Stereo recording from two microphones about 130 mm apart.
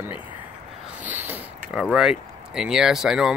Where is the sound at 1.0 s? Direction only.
15° right (ahead or behind).